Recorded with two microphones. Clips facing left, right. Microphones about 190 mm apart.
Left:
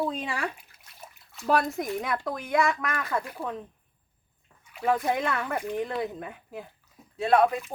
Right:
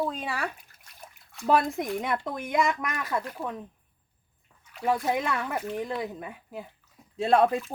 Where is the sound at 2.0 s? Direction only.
25° right (ahead or behind).